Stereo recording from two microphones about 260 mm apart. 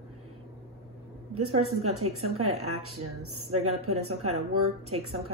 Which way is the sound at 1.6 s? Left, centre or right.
Right.